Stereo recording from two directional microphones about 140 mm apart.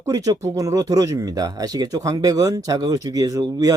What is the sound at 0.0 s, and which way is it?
Speech, 25° right (ahead or behind).